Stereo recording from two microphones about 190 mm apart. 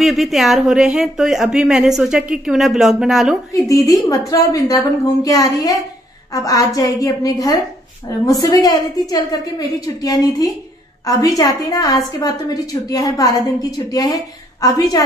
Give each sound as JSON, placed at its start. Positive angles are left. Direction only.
{"t": 0.0, "sound": "speech", "side_deg": 0}
{"t": 3.6, "sound": "a woman's voice", "side_deg": 20}